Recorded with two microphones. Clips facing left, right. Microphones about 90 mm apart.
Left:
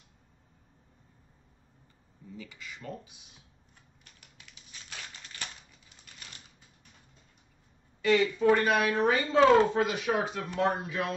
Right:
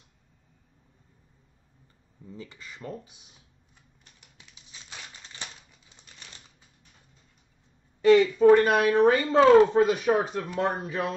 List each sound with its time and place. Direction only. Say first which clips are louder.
2.3 s speech: right 2 dB; 35° right (ahead or behind)
4.4 s crumpling: even; 20° right (ahead or behind)
8.0 s a woman's voice: right 7 dB; 40° right (ahead or behind)